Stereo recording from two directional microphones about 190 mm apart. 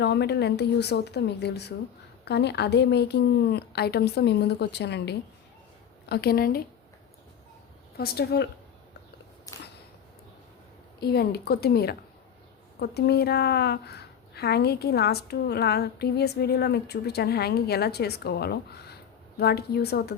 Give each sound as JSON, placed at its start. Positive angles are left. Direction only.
{"t": 0.0, "sound": "a woman's voice", "side_deg": 60}
{"t": 7.9, "sound": "a woman's voice", "side_deg": 55}
{"t": 9.5, "sound": "a sound", "side_deg": 15}
{"t": 11.0, "sound": "a woman's voice", "side_deg": 55}